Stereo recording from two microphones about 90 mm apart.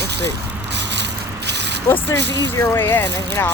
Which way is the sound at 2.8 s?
25° left (ahead or behind).